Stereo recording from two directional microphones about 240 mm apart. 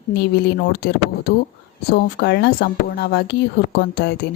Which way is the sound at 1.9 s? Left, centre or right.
Left.